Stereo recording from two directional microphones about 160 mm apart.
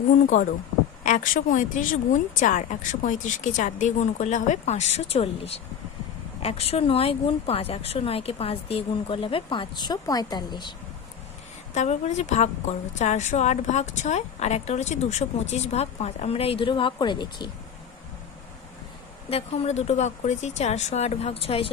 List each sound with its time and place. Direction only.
1.0 s a woman's voice: 55° left (ahead or behind); by 10.8 s 30° left (ahead or behind)
11.7 s a woman's voice: 45° left (ahead or behind); by 17.5 s 30° left (ahead or behind)
19.3 s a woman's voice: 40° left (ahead or behind)